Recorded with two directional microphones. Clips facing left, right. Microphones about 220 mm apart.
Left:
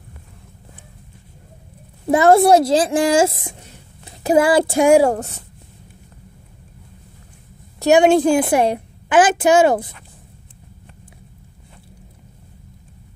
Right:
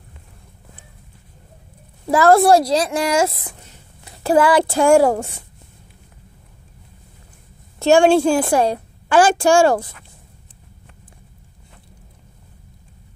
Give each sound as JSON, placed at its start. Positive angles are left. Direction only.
{"t": 2.0, "sound": "a woman's voice", "side_deg": 20}
{"t": 4.3, "sound": "a woman's voice", "side_deg": 20}
{"t": 4.9, "sound": "speech", "side_deg": 0}
{"t": 7.8, "sound": "a woman's voice", "side_deg": 20}